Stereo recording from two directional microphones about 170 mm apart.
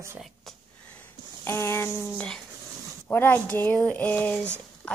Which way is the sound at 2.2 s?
5° left (ahead or behind).